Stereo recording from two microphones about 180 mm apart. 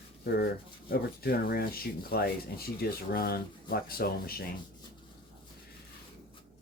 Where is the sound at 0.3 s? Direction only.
60° left (ahead or behind).